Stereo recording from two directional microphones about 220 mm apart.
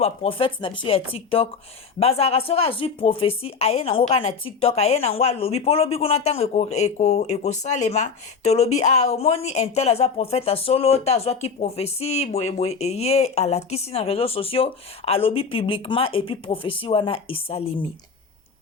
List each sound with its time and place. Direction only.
0.0 s a woman's voice: 25° left (ahead or behind)